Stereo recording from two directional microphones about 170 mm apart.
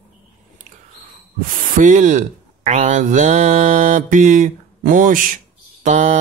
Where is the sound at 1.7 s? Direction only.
50° right (ahead or behind).